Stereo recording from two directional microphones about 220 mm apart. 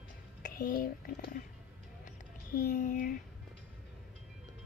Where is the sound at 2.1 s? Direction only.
40° left (ahead or behind).